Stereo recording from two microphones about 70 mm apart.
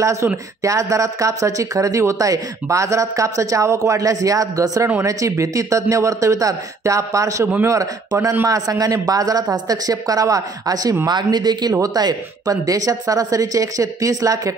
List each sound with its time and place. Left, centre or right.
0.0 s a woman's voice: right
11.1 s speech: right
11.7 s a woman's voice: right